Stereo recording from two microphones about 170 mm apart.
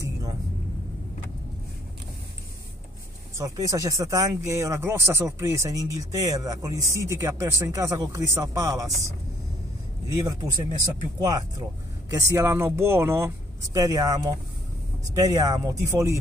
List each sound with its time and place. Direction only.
3.3 s speech: 20° right (ahead or behind)
10.0 s speech: 20° right (ahead or behind)